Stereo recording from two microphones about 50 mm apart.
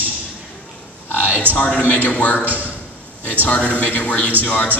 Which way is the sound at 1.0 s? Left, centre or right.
Left.